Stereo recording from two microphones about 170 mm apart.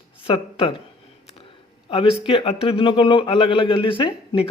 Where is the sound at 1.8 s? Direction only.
30° left (ahead or behind).